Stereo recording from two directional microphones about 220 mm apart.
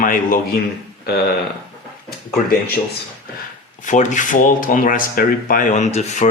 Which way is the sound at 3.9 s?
35° left (ahead or behind).